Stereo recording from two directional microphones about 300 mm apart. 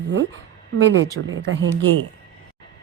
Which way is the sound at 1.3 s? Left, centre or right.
Right.